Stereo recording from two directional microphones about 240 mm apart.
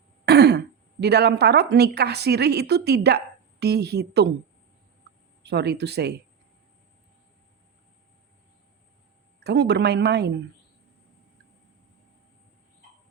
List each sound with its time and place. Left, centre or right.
0.3 s speech: right
5.1 s a sound: right
5.4 s speech: right
9.4 s speech: right